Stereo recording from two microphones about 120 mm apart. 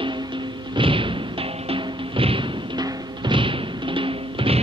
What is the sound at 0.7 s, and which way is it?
Music, 45° right (ahead or behind).